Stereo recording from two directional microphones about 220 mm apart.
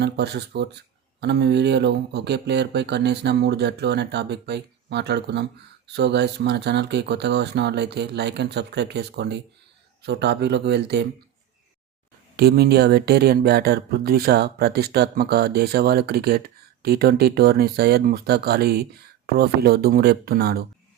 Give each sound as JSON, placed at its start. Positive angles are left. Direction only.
{"t": 0.0, "sound": "speech", "side_deg": -50}
{"t": 12.4, "sound": "speech", "side_deg": -45}